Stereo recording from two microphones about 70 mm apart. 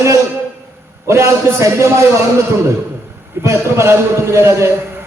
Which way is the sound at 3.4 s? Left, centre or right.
Right.